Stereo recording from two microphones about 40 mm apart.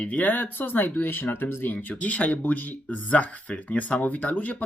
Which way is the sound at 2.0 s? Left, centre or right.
Left.